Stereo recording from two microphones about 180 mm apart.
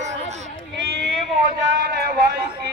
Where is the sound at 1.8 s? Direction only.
65° right (ahead or behind).